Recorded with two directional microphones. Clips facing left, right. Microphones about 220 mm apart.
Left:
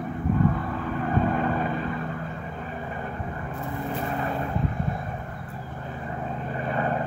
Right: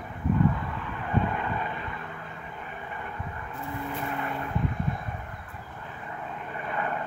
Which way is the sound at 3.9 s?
35° left (ahead or behind).